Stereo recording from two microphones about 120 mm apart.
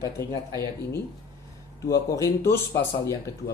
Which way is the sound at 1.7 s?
25° left (ahead or behind).